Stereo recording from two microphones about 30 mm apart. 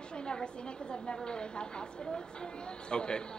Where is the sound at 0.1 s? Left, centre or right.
Left.